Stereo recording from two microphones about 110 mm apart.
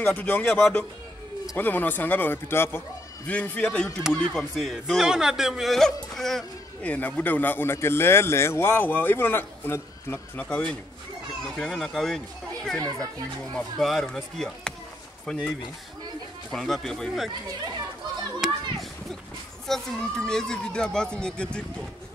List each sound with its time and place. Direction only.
0.0 s speech: 15° left (ahead or behind)
6.9 s a man's voice: 15° left (ahead or behind)
10.5 s speech: 10° left (ahead or behind)
16.5 s speech: centre (ahead or behind)
18.4 s children playing: centre (ahead or behind)
19.7 s speech: 5° left (ahead or behind)